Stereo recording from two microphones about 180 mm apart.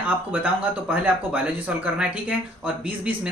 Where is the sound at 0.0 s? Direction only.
10° right (ahead or behind).